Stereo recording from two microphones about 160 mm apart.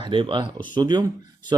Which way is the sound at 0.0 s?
30° right (ahead or behind).